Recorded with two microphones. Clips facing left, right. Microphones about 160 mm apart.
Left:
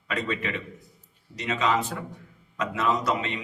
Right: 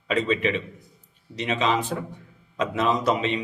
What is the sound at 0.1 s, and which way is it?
A man's voice, 20° right (ahead or behind).